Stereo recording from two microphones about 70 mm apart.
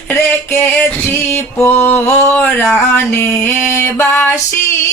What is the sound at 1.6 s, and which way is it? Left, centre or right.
Music, left.